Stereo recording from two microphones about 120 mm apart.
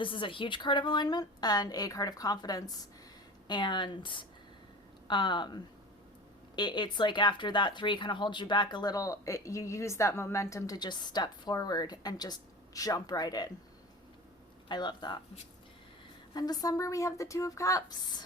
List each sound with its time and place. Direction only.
0.0 s speech: 45° left (ahead or behind)
14.7 s speech: 35° left (ahead or behind)
16.3 s a woman's voice: 35° left (ahead or behind)